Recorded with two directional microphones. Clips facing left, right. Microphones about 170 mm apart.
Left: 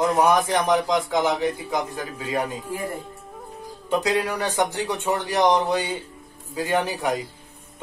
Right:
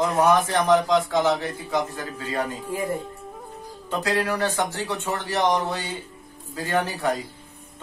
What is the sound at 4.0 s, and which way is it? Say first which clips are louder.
A man's voice: right 3 dB; 15° left (ahead or behind).